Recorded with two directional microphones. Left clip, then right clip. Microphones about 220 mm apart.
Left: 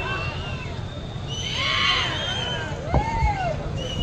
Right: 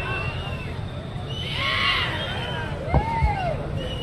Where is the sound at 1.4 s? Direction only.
5° left (ahead or behind).